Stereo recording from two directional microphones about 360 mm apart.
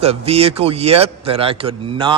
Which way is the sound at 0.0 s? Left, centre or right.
Centre.